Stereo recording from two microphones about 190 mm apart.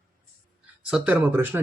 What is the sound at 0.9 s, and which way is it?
Speech, 5° right (ahead or behind).